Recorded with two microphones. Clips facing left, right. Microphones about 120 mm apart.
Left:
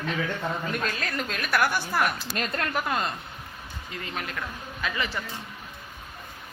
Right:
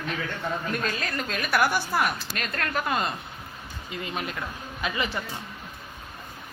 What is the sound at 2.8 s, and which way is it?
Speech, 5° right (ahead or behind).